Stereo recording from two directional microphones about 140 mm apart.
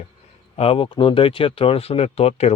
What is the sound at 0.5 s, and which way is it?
Speech, 45° left (ahead or behind).